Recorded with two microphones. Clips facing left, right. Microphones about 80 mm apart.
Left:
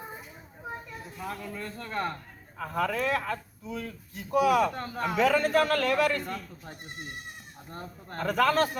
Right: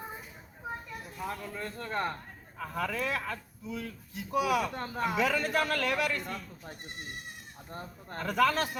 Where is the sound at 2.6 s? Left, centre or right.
Left.